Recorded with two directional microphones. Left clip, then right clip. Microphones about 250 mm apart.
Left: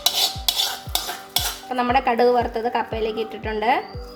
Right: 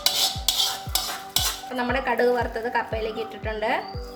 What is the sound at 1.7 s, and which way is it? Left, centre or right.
A woman's voice, left.